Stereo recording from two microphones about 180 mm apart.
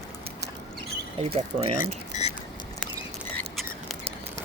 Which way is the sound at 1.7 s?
45° left (ahead or behind).